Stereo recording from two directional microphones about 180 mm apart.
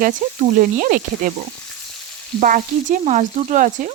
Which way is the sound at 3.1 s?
40° right (ahead or behind).